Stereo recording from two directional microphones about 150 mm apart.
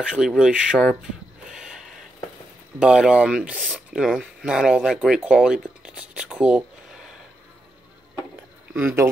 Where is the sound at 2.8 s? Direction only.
5° right (ahead or behind).